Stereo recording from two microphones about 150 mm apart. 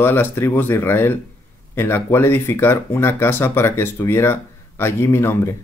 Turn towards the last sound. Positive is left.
turn(degrees=15)  # may be behind; listen again after turning